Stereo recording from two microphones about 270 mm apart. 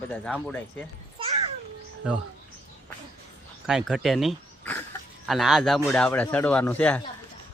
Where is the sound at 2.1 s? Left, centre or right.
Centre.